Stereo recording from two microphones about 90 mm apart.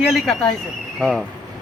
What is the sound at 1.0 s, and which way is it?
Speech, centre (ahead or behind).